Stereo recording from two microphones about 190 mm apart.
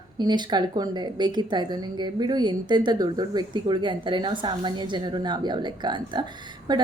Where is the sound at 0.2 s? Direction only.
20° right (ahead or behind).